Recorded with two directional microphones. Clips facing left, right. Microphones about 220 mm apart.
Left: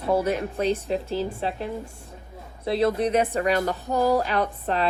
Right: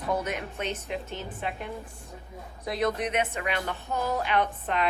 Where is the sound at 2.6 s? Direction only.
30° left (ahead or behind).